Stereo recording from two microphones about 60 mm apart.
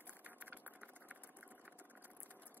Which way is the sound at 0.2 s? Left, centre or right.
Right.